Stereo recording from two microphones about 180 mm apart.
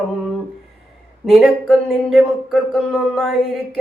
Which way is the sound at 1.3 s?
Centre (ahead or behind).